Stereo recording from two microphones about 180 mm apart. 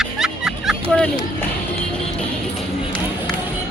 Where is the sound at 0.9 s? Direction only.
5° left (ahead or behind).